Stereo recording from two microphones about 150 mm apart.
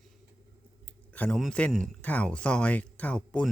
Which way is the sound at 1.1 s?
5° left (ahead or behind).